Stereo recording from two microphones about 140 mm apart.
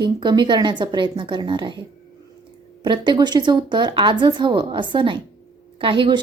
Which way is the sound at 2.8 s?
35° right (ahead or behind).